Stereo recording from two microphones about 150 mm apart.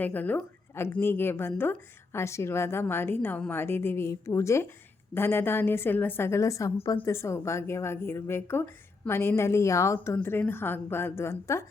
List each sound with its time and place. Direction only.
0.0 s a woman's voice: 10° left (ahead or behind)